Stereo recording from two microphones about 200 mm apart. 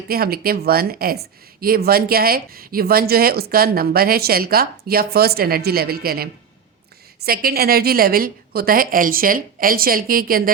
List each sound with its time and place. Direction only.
0.1 s speech: 50° right (ahead or behind)
7.3 s speech: 50° right (ahead or behind)